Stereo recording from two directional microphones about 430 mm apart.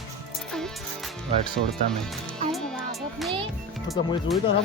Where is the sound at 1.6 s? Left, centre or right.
Right.